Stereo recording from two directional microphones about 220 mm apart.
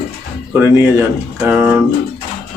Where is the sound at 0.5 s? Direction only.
10° right (ahead or behind).